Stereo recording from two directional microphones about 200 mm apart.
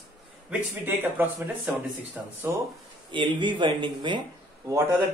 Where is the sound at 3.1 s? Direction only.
25° right (ahead or behind).